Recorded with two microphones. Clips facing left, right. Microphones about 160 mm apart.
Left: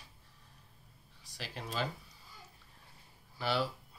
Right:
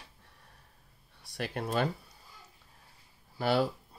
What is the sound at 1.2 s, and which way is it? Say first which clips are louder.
Speech: right 9 dB; 55° right (ahead or behind).